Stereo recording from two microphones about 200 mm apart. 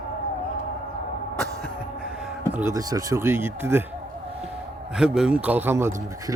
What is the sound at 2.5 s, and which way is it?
Speech, 10° right (ahead or behind).